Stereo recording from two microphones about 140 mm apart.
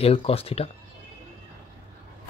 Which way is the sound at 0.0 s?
45° left (ahead or behind).